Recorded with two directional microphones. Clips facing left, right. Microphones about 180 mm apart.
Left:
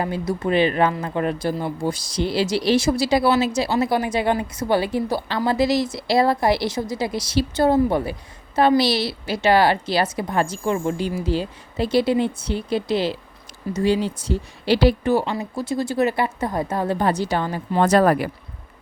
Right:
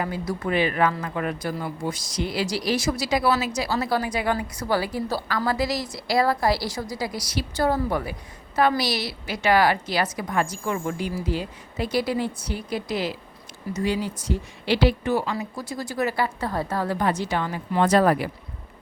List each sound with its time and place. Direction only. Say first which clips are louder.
0.0 s speech: left 4 dB; 25° left (ahead or behind)
17.1 s a woman's voice: left 3 dB; 35° left (ahead or behind)